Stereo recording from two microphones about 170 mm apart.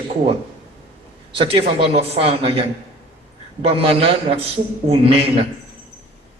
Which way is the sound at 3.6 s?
35° right (ahead or behind).